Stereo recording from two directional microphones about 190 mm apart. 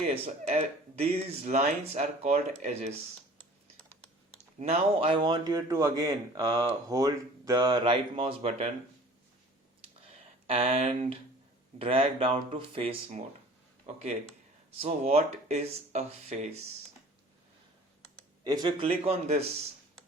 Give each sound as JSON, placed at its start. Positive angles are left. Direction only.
{"t": 0.1, "sound": "speech", "side_deg": -35}
{"t": 4.4, "sound": "speech", "side_deg": -35}
{"t": 10.4, "sound": "speech", "side_deg": -30}
{"t": 18.4, "sound": "speech", "side_deg": -20}